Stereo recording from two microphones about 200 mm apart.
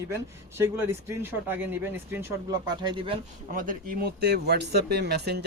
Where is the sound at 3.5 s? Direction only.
45° right (ahead or behind).